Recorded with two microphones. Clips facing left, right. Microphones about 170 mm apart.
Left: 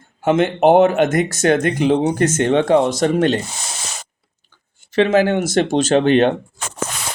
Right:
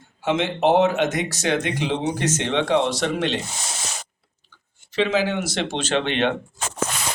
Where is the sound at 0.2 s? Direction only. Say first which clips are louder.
Left 6 dB; 50° left (ahead or behind).